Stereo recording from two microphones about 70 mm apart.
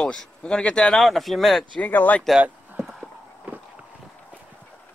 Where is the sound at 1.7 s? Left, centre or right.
Left.